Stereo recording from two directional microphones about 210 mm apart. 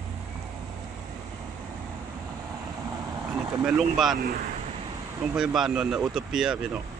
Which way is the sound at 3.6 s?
5° right (ahead or behind).